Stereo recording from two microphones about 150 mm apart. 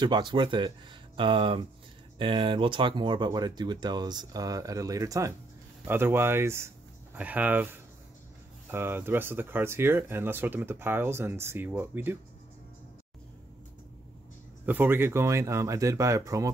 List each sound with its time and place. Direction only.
0.0 s speech: 30° right (ahead or behind); by 12.2 s 15° right (ahead or behind)
14.7 s speech: 15° right (ahead or behind)